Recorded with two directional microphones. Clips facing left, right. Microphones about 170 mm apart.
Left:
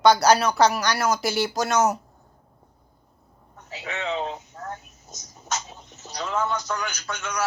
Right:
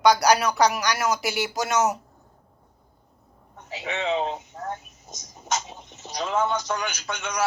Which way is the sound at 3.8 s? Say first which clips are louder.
Right 3 dB; 25° right (ahead or behind).